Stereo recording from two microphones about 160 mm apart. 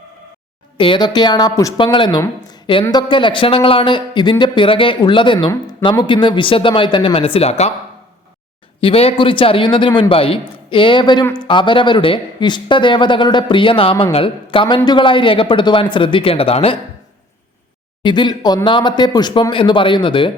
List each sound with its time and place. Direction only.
0.8 s speech: 30° left (ahead or behind)
8.8 s speech: 35° left (ahead or behind)
18.0 s speech: 30° left (ahead or behind)